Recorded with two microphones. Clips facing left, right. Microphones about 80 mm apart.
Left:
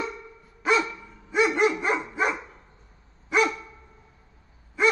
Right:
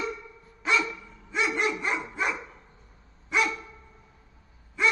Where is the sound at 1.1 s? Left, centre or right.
Centre.